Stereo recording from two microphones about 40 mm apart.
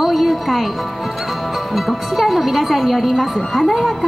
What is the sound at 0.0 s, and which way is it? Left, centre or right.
Music, centre.